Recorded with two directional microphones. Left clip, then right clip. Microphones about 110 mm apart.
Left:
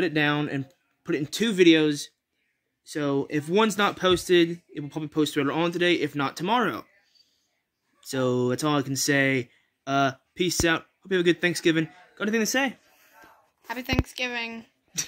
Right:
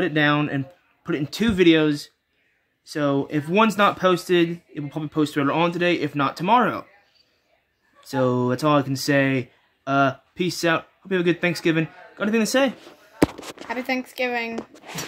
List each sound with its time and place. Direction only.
0.0 s speech: 5° right (ahead or behind)
8.0 s speech: 5° right (ahead or behind)
12.4 s speech: 30° right (ahead or behind)
13.7 s speech: 5° right (ahead or behind)
14.0 s speech: 15° right (ahead or behind)